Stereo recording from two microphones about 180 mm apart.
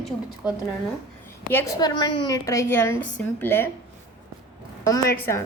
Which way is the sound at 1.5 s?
20° left (ahead or behind).